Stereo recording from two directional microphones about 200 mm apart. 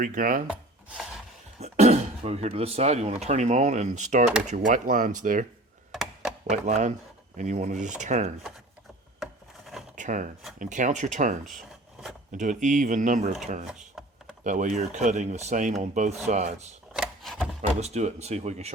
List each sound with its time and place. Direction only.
0.0 s speech: 40° right (ahead or behind)
0.4 s chopping: 5° right (ahead or behind)
1.5 s speech: 30° right (ahead or behind)
5.9 s a sound: centre (ahead or behind)
6.5 s speech: 35° right (ahead or behind)
9.2 s rub: centre (ahead or behind)
9.9 s rub: 40° right (ahead or behind)
10.6 s speech: 40° right (ahead or behind)
13.7 s computer keyboard: 5° right (ahead or behind)
14.4 s speech: 40° right (ahead or behind)
16.9 s a sound: 5° right (ahead or behind)
17.7 s speech: 35° right (ahead or behind)